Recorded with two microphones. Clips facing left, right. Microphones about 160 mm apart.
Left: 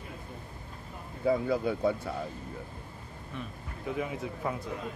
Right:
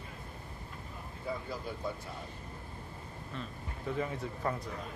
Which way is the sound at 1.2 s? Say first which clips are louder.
Left 12 dB; 75° left (ahead or behind).